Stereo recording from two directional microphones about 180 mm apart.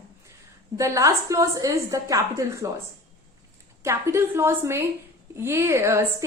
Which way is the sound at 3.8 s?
15° right (ahead or behind).